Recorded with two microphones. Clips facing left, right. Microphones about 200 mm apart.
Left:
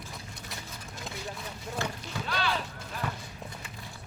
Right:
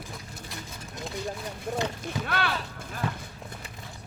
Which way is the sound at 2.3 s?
55° right (ahead or behind).